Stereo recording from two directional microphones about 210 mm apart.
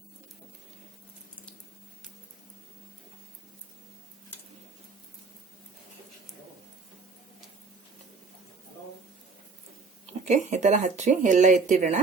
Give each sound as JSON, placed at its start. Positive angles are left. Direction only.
{"t": 10.2, "sound": "speech", "side_deg": -35}